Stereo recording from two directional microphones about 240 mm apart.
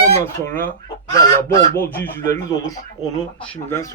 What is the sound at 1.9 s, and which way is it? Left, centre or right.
A man's voice, centre.